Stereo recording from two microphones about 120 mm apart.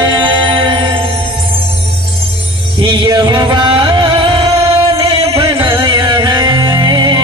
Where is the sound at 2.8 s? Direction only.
40° right (ahead or behind).